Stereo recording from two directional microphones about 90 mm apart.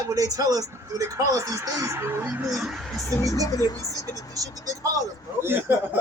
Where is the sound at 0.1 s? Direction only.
40° right (ahead or behind).